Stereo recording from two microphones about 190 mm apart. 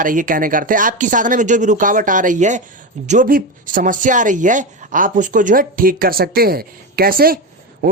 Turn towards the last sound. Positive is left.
turn(degrees=-50)  # may be behind; listen again after turning